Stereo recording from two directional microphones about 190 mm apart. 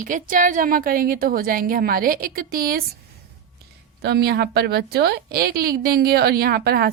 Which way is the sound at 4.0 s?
55° right (ahead or behind).